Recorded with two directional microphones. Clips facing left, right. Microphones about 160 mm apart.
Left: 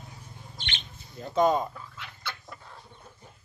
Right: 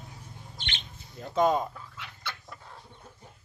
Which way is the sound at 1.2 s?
Centre (ahead or behind).